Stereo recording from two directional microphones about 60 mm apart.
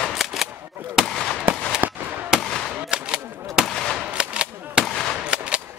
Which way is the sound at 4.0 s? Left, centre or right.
Centre.